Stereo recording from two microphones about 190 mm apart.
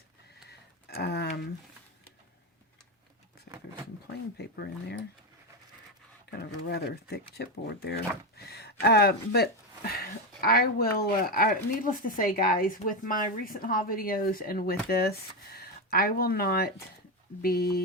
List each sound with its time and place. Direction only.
0.4 s a sound: 60° left (ahead or behind)
4.4 s speech: 60° left (ahead or behind)
6.3 s speech: 60° left (ahead or behind)